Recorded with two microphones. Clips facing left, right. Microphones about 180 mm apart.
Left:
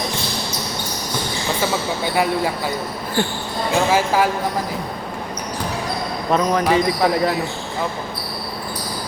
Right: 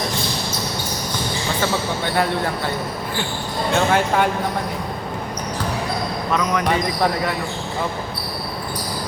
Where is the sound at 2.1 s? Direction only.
10° left (ahead or behind).